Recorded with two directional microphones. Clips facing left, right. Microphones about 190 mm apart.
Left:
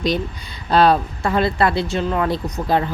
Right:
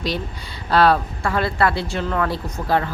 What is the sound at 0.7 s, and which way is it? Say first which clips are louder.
A woman's voice: left 2 dB; 20° left (ahead or behind).